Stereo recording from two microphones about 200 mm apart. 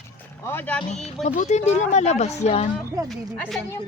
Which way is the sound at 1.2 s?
35° left (ahead or behind).